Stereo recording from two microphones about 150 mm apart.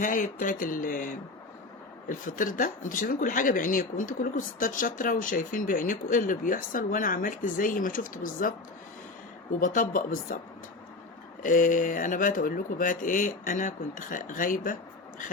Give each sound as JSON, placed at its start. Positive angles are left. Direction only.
{"t": 0.0, "sound": "speech", "side_deg": 60}
{"t": 11.4, "sound": "speech", "side_deg": 60}